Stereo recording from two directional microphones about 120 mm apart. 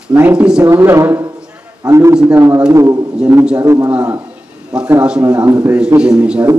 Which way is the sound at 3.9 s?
10° right (ahead or behind).